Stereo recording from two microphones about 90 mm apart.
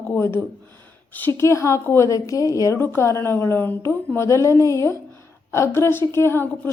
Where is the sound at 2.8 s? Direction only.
25° left (ahead or behind).